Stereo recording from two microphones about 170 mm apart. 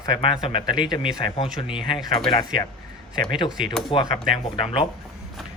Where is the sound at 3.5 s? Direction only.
5° right (ahead or behind).